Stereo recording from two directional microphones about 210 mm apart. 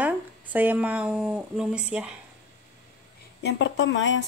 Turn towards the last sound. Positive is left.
turn(degrees=60)  # may be behind; listen again after turning